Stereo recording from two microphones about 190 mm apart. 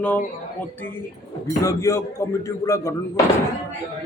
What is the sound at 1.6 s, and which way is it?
Speech, 15° left (ahead or behind).